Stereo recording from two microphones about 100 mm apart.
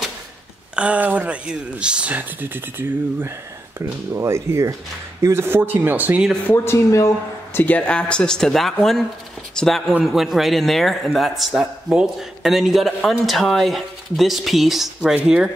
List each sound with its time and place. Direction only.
0.7 s speech: 15° right (ahead or behind)
6.4 s speech: 25° left (ahead or behind)
7.5 s a man's voice: 15° left (ahead or behind); by 15.5 s 5° right (ahead or behind)